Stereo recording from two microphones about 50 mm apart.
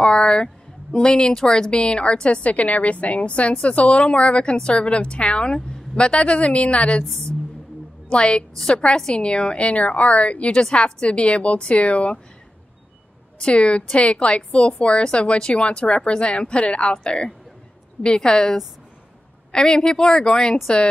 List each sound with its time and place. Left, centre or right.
0.0 s a sound: centre
0.9 s a woman's voice: centre
8.1 s a woman's voice: left
13.4 s a woman's voice: left